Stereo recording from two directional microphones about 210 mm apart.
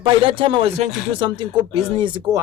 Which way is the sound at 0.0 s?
25° right (ahead or behind).